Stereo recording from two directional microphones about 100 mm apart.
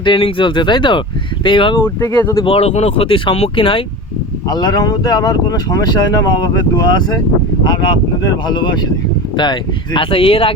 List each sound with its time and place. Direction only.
0.0 s speech: 60° left (ahead or behind)
1.8 s speech: 25° left (ahead or behind)
2.4 s speech: 85° left
3.3 s speech: 75° left (ahead or behind)
4.4 s speech: 40° left (ahead or behind); by 10.5 s 70° left (ahead or behind)